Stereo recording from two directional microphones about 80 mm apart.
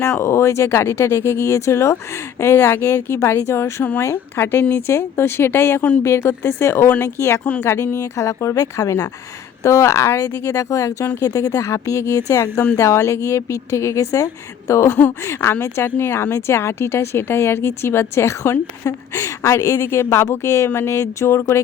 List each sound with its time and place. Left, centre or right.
0.0 s speech: left
7.4 s speech: centre
7.7 s speech: left